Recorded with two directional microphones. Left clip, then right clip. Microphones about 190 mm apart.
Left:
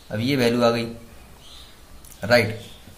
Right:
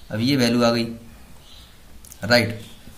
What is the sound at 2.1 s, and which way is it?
Speech, 25° right (ahead or behind).